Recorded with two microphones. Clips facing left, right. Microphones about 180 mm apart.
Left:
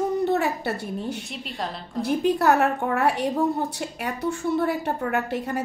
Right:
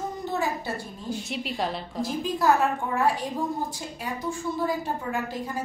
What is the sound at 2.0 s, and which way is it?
A woman's voice, 65° left (ahead or behind).